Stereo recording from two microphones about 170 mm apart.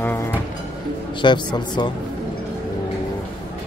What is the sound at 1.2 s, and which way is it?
Speech, 25° left (ahead or behind).